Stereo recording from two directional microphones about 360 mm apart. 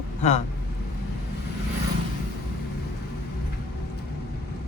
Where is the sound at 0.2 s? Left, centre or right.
Centre.